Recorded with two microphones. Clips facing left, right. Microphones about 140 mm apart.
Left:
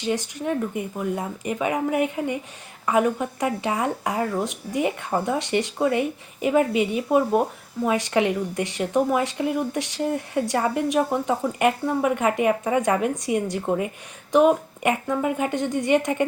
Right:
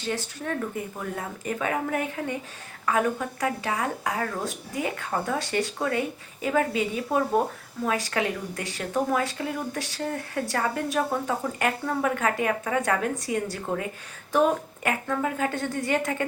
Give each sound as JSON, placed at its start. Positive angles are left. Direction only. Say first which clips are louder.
{"t": 0.0, "sound": "speech", "louder": "left 5 dB", "side_deg": 15}
{"t": 14.8, "sound": "speech", "louder": "left 4 dB", "side_deg": 15}